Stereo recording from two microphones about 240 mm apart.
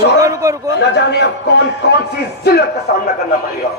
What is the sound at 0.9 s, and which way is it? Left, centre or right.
Speech, left.